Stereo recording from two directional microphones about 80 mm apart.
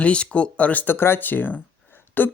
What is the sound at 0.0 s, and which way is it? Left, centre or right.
Speech, centre.